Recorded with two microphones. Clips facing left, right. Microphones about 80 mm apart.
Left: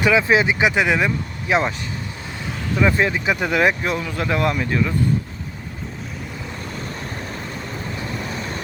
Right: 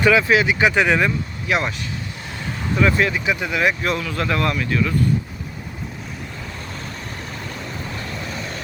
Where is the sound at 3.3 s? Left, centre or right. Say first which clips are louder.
Left 2 dB; left.